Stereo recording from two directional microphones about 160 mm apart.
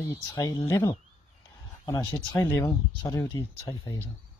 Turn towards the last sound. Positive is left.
turn(degrees=25)  # may be behind; listen again after turning